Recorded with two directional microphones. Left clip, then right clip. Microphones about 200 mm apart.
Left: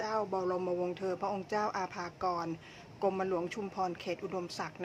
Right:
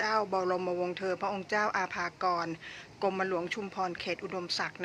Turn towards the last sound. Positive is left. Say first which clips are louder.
# right 4 dB
turn(degrees=10)  # may be behind; listen again after turning